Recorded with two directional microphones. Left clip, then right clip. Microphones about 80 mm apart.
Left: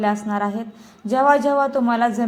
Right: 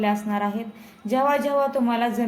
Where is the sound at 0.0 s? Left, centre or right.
Centre.